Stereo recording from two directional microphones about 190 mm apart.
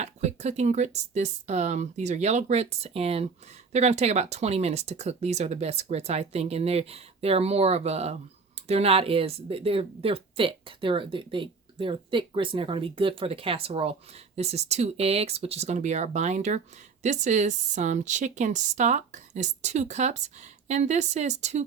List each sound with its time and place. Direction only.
0.0 s a woman's voice: 35° right (ahead or behind)